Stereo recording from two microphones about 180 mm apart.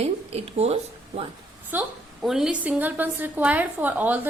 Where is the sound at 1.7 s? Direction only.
5° right (ahead or behind).